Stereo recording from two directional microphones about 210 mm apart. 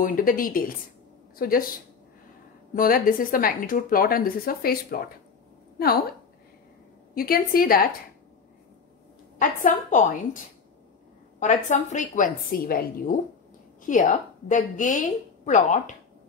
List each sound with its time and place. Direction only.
0.0 s a woman's voice: 40° left (ahead or behind)
2.7 s a woman's voice: 40° left (ahead or behind)
7.2 s a woman's voice: 45° left (ahead or behind)
9.4 s a woman's voice: 40° left (ahead or behind)